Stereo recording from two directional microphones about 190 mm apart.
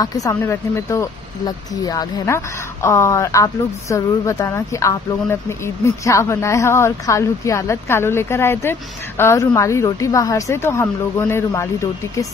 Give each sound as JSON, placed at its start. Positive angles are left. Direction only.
{"t": 0.0, "sound": "speech", "side_deg": 20}